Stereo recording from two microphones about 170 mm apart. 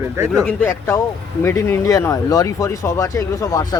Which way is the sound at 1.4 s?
15° left (ahead or behind).